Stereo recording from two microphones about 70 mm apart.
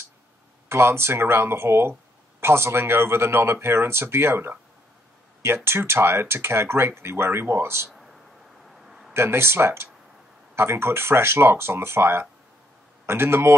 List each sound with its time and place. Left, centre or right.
0.7 s speech: right
7.9 s a sound: centre
9.1 s speech: right